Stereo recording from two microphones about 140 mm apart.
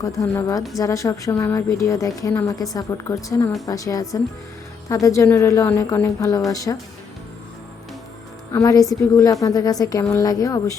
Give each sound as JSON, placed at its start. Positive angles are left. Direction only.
{"t": 0.0, "sound": "speech", "side_deg": 25}
{"t": 8.5, "sound": "speech", "side_deg": 25}